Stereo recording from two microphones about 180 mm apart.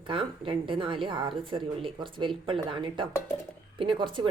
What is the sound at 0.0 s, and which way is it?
Speech, 30° right (ahead or behind).